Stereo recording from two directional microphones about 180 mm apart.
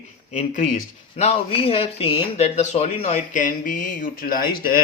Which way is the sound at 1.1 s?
35° left (ahead or behind).